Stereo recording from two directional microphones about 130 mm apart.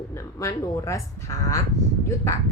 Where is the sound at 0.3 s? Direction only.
25° left (ahead or behind).